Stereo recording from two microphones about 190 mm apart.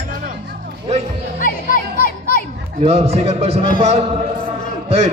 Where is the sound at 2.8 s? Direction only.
30° right (ahead or behind).